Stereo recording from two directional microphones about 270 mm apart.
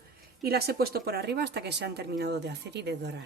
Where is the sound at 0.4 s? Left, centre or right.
Right.